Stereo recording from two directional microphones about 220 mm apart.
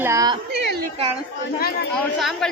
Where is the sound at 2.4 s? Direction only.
5° left (ahead or behind).